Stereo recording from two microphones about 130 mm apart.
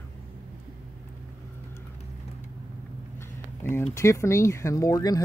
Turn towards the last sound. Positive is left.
turn(degrees=30)  # may be behind; listen again after turning